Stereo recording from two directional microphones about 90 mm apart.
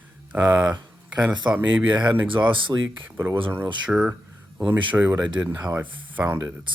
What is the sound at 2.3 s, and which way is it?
Speech, 65° right (ahead or behind).